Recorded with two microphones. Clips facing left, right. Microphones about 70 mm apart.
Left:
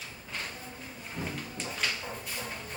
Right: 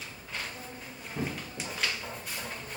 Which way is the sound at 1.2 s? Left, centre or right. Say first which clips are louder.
Right 3 dB; centre.